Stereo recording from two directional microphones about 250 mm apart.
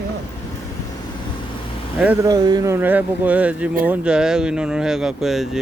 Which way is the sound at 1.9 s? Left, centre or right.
Centre.